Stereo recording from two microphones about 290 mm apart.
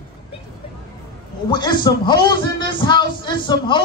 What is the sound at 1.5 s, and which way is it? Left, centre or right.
A man's voice, centre.